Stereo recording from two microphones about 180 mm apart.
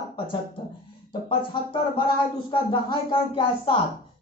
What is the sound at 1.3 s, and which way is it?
Speech, 30° left (ahead or behind).